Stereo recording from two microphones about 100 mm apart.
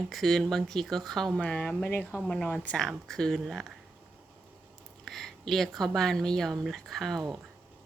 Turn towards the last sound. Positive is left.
turn(degrees=0)  # may be behind; listen again after turning